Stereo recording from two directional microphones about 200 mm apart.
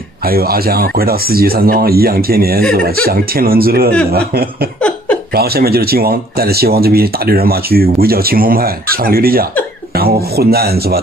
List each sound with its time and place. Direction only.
0.3 s speech: 50° right (ahead or behind)
5.3 s speech: 50° right (ahead or behind)